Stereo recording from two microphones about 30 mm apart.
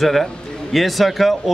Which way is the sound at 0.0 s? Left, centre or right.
Centre.